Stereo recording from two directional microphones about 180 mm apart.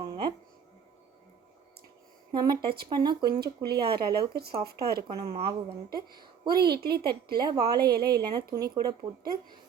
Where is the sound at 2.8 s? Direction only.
25° right (ahead or behind).